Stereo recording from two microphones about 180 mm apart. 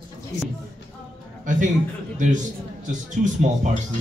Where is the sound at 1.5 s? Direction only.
45° right (ahead or behind).